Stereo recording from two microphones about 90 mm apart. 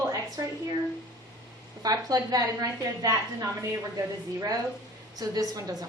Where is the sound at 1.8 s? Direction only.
45° right (ahead or behind).